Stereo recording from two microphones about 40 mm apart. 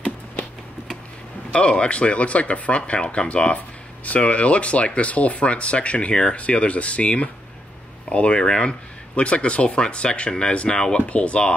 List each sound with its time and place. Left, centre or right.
1.5 s speech: left